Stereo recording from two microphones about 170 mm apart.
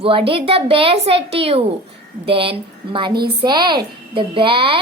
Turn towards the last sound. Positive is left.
turn(degrees=-30)  # may be behind; listen again after turning